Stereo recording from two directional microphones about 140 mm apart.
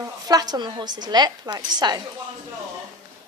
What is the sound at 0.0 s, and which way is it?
A woman's voice, 25° right (ahead or behind).